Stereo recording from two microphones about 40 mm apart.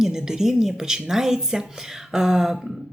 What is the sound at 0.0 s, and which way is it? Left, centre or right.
A woman's voice, centre.